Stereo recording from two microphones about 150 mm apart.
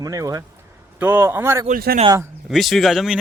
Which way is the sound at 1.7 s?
80° right.